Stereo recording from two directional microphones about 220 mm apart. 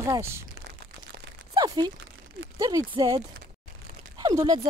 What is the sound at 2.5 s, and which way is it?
Speech, 15° right (ahead or behind).